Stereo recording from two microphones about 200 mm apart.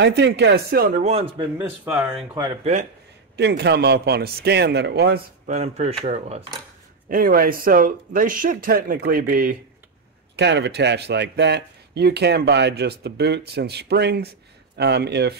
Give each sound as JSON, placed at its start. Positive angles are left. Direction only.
{"t": 0.0, "sound": "speech", "side_deg": -60}
{"t": 1.0, "sound": "a man's voice", "side_deg": -30}
{"t": 1.6, "sound": "speech", "side_deg": -5}
{"t": 2.6, "sound": "a man's voice", "side_deg": -35}
{"t": 3.3, "sound": "speech", "side_deg": -55}
{"t": 5.5, "sound": "a man's voice", "side_deg": -35}
{"t": 7.1, "sound": "speech", "side_deg": -45}
{"t": 10.3, "sound": "speech", "side_deg": -60}